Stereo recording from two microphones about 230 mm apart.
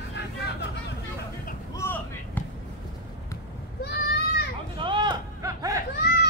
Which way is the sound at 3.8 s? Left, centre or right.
Left.